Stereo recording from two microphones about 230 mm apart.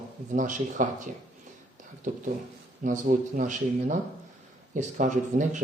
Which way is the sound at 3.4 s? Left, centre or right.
Right.